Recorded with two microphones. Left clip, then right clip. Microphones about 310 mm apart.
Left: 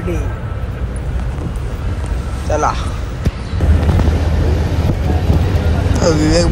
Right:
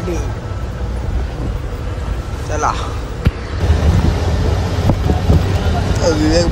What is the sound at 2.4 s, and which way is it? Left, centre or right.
Speech, centre.